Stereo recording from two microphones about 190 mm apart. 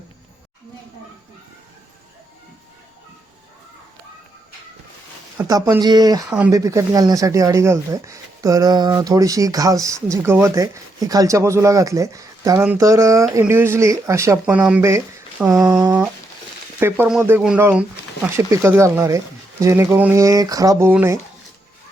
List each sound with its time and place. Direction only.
5.5 s speech: 20° right (ahead or behind)
6.3 s speech: 10° right (ahead or behind)
15.8 s a sound: 20° right (ahead or behind)
16.8 s speech: 5° right (ahead or behind)